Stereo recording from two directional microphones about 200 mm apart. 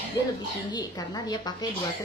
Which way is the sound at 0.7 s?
20° left (ahead or behind).